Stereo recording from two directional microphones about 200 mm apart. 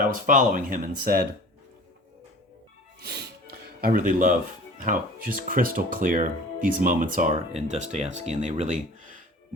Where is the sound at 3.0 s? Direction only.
55° right (ahead or behind).